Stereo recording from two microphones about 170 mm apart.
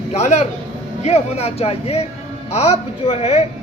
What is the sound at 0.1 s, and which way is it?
A man's voice, 40° left (ahead or behind).